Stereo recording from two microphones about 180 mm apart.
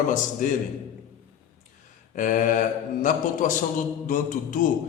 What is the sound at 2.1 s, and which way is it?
A man's voice, 45° left (ahead or behind).